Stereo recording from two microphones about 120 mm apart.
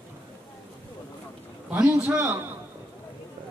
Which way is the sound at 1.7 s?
15° right (ahead or behind).